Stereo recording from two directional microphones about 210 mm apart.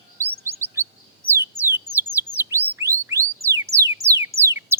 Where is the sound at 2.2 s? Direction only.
10° right (ahead or behind).